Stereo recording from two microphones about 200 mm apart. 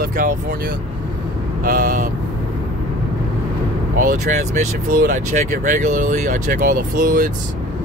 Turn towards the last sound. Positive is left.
turn(degrees=-40)  # may be behind; listen again after turning